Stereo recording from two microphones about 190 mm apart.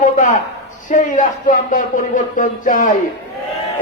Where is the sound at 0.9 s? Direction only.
45° left (ahead or behind).